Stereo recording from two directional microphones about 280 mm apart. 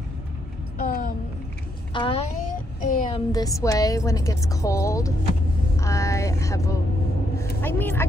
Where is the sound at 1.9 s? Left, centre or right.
Centre.